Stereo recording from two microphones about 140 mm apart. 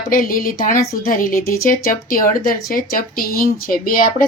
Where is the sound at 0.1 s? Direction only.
90° left.